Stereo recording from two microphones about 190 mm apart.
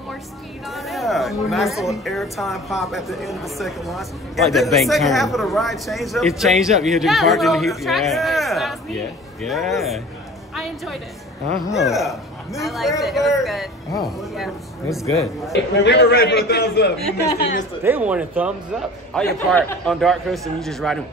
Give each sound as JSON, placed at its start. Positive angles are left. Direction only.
{"t": 0.7, "sound": "a woman's voice", "side_deg": 0}
{"t": 10.5, "sound": "a sound", "side_deg": 0}
{"t": 11.7, "sound": "a woman's voice", "side_deg": 0}
{"t": 15.5, "sound": "a man's voice", "side_deg": 60}
{"t": 17.4, "sound": "a woman's voice", "side_deg": 45}
{"t": 17.8, "sound": "a man's voice", "side_deg": -10}